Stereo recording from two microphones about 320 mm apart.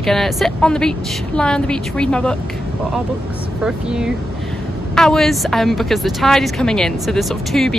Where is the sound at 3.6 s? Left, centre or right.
Centre.